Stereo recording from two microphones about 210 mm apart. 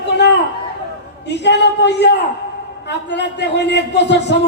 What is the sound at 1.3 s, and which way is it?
A man's voice, 55° left (ahead or behind).